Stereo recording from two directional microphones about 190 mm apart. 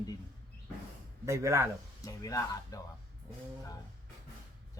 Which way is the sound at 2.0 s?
15° left (ahead or behind).